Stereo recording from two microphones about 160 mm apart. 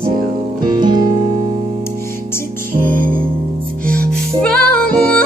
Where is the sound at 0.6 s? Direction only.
25° right (ahead or behind).